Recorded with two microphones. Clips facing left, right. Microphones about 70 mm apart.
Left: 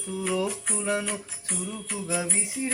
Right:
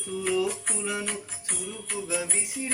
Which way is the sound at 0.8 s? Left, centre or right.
Left.